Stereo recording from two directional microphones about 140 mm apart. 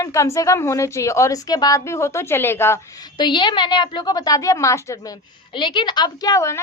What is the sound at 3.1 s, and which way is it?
A woman's voice, 35° left (ahead or behind).